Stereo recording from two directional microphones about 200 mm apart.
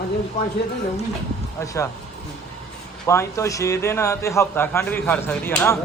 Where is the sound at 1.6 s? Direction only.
15° left (ahead or behind).